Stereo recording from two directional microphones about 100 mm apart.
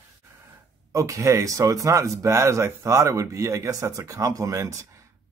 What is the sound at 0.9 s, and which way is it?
Speech, 30° right (ahead or behind).